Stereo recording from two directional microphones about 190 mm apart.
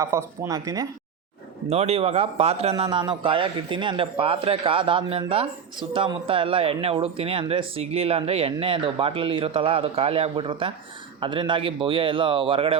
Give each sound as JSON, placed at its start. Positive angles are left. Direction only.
{"t": 0.0, "sound": "speech", "side_deg": -15}
{"t": 1.6, "sound": "speech", "side_deg": -35}